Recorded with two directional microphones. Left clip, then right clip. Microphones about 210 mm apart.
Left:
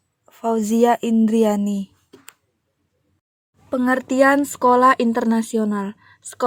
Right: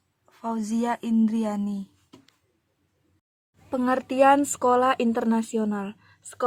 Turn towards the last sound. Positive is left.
turn(degrees=20)  # may be behind; listen again after turning